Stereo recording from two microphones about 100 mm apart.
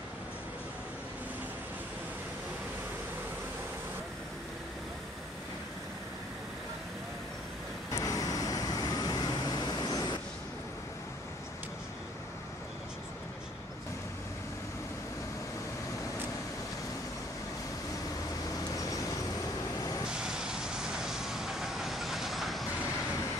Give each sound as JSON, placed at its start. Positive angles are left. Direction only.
{"t": 7.9, "sound": "vehicle", "side_deg": 35}
{"t": 20.1, "sound": "vehicle", "side_deg": -5}